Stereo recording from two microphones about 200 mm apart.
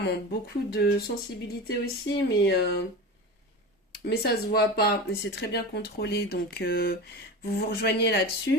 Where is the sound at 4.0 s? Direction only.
50° left (ahead or behind).